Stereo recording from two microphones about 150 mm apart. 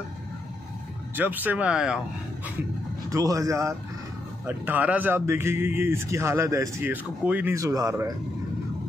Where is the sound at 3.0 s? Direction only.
20° right (ahead or behind).